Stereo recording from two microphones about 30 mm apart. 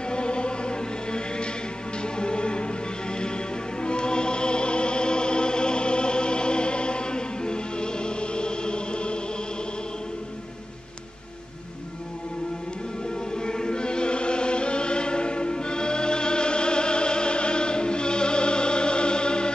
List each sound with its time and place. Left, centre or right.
0.1 s chant: left
2.1 s music: left
13.3 s chant: left